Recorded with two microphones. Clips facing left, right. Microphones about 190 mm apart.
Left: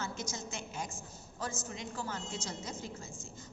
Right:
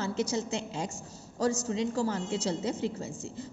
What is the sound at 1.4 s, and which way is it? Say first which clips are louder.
A woman's voice: right 12 dB; 35° right (ahead or behind).